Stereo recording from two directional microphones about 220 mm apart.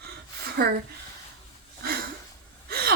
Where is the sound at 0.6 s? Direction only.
45° right (ahead or behind).